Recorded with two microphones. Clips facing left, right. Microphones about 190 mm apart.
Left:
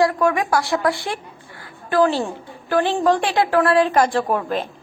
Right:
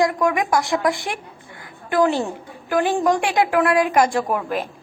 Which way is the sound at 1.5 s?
20° right (ahead or behind).